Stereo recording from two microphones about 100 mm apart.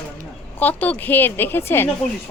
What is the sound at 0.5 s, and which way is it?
A woman's voice, 15° left (ahead or behind).